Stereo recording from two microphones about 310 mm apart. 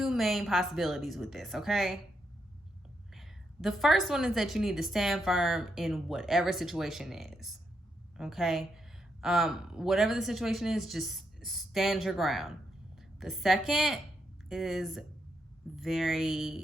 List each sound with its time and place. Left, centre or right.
0.0 s a woman's voice: centre
3.1 s a woman's voice: centre